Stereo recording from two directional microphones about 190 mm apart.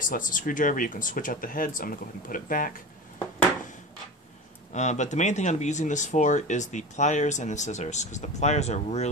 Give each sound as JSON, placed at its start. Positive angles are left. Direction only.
{"t": 0.0, "sound": "speech", "side_deg": 45}
{"t": 4.7, "sound": "speech", "side_deg": 40}